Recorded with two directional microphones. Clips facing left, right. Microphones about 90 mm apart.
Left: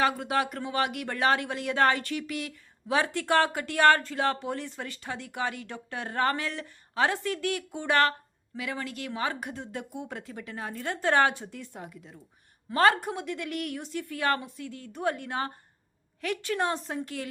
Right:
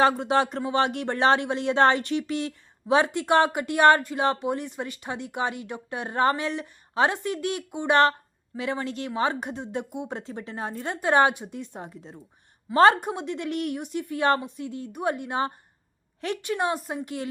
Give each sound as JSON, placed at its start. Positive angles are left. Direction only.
{"t": 0.0, "sound": "a woman's voice", "side_deg": -25}